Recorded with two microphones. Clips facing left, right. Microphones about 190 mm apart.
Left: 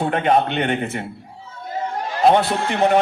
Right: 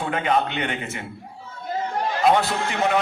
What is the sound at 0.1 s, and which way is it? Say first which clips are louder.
Speech: left 2 dB; 50° left (ahead or behind).